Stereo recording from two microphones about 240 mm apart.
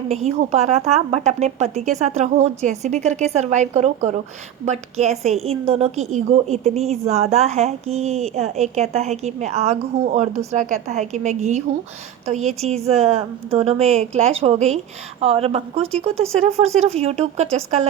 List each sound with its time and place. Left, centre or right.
0.1 s a woman's voice: right